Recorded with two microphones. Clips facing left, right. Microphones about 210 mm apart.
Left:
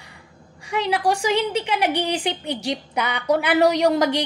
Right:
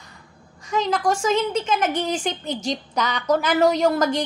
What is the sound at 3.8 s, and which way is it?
Speech, 15° left (ahead or behind).